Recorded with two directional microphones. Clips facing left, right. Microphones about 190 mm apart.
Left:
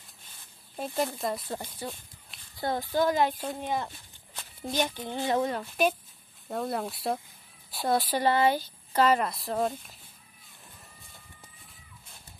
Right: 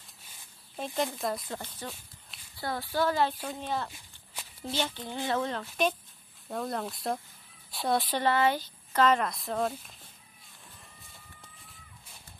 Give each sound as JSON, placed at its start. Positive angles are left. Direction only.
{"t": 0.7, "sound": "speech", "side_deg": 5}
{"t": 1.5, "sound": "speech", "side_deg": 10}
{"t": 3.9, "sound": "walk", "side_deg": -10}
{"t": 4.6, "sound": "speech", "side_deg": 15}